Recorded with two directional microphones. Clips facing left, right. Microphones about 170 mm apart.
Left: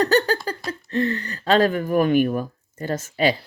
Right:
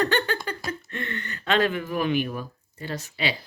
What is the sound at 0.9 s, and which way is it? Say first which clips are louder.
Speech: left 11 dB; 35° left (ahead or behind).